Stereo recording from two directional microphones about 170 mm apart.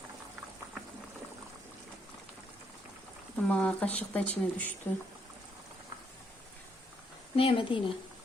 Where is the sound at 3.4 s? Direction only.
5° left (ahead or behind).